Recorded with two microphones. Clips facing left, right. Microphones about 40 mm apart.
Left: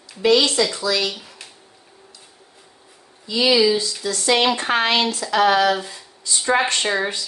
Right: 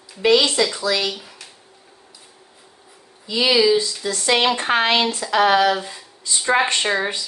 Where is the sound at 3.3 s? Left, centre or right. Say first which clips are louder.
Even; centre.